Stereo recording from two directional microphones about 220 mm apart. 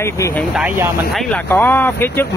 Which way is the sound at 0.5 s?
5° right (ahead or behind).